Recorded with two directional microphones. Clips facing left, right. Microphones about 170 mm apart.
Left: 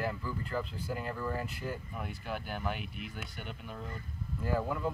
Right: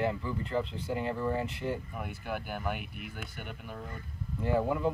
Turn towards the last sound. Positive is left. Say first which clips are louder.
# right 4 dB
turn(degrees=-20)  # may be behind; listen again after turning